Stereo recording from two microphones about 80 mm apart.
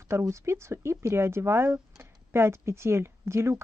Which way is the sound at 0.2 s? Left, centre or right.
Right.